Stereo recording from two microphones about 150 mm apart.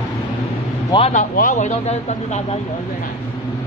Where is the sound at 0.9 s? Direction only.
40° left (ahead or behind).